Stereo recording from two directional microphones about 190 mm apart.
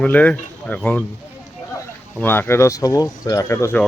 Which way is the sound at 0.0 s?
5° left (ahead or behind).